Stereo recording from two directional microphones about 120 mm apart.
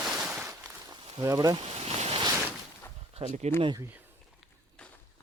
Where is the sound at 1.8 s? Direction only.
55° right (ahead or behind).